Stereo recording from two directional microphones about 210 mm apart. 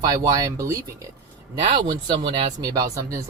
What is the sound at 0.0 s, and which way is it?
Speech, 20° right (ahead or behind).